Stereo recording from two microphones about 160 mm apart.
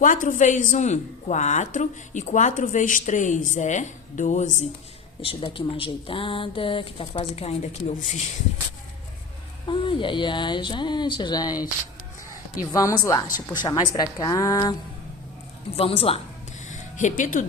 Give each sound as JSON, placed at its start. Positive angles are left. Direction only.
{"t": 0.0, "sound": "a woman's voice", "side_deg": 55}
{"t": 5.2, "sound": "speech", "side_deg": 35}
{"t": 9.6, "sound": "speech", "side_deg": 30}
{"t": 12.7, "sound": "speech", "side_deg": 20}
{"t": 15.7, "sound": "speech", "side_deg": 35}
{"t": 16.6, "sound": "music", "side_deg": 50}